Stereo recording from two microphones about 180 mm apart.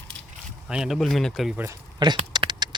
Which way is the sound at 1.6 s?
25° right (ahead or behind).